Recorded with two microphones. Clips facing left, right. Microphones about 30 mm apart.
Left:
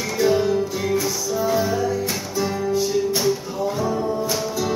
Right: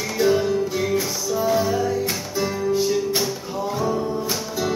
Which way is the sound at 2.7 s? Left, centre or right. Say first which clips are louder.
Right 1 dB; centre.